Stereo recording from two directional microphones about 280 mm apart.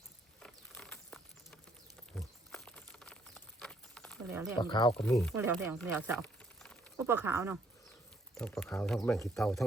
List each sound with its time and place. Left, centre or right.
0.3 s a sound: centre
4.5 s speech: centre
4.9 s speech: centre
6.2 s a sound: centre
6.9 s speech: centre
8.4 s speech: centre